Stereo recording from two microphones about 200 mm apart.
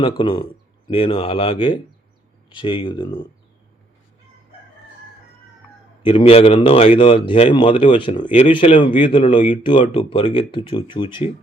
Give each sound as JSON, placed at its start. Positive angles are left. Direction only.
{"t": 0.0, "sound": "speech", "side_deg": 25}
{"t": 6.1, "sound": "speech", "side_deg": 25}